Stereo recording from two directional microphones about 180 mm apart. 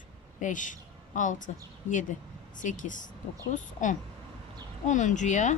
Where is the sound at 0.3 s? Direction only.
45° left (ahead or behind).